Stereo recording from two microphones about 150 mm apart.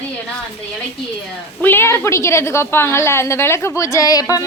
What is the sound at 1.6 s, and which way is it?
A woman's voice, 15° left (ahead or behind).